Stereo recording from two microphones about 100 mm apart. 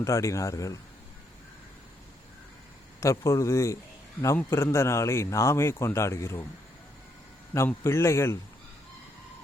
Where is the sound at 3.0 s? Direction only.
30° left (ahead or behind).